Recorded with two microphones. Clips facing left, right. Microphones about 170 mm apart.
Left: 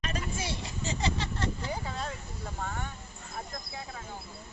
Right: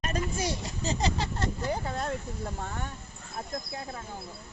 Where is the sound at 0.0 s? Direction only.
45° right (ahead or behind).